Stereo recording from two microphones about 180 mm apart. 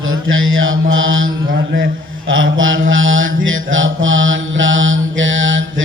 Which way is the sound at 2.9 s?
90° right.